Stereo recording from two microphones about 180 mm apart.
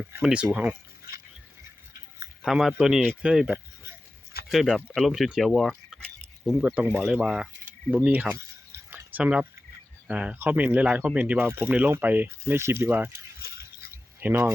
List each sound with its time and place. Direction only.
0.2 s speech: 5° right (ahead or behind)
2.4 s speech: centre (ahead or behind)
8.9 s a sound: 10° right (ahead or behind)
10.1 s speech: 5° right (ahead or behind)
13.4 s mechanisms: 60° left (ahead or behind)
14.2 s speech: 10° right (ahead or behind)